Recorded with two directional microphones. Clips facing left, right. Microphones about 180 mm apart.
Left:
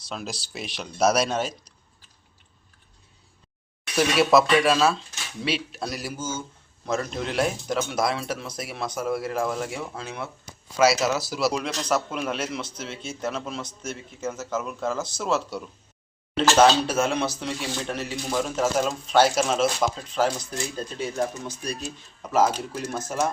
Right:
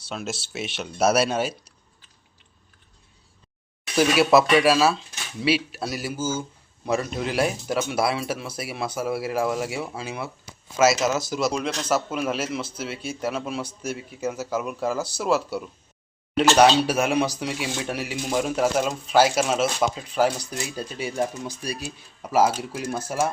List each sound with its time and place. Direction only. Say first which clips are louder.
0.1 s a man's voice: right 2 dB; 5° right (ahead or behind)
3.9 s a man's voice: right 1 dB; centre (ahead or behind)
6.1 s speech: right 5 dB; 30° right (ahead or behind)
6.8 s a man's voice: right 2 dB; 10° right (ahead or behind)